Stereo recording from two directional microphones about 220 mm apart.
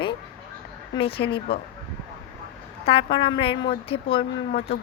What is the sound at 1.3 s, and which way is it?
Speech, 45° left (ahead or behind).